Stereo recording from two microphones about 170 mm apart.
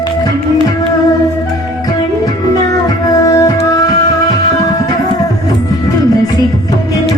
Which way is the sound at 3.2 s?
20° left (ahead or behind).